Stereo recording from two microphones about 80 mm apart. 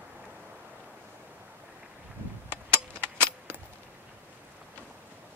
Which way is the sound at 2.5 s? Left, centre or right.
Right.